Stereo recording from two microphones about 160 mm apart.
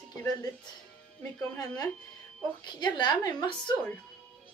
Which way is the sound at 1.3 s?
25° left (ahead or behind).